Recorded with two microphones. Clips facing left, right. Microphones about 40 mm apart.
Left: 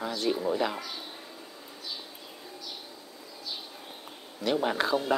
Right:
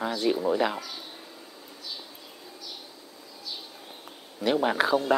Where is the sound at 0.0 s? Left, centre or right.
Centre.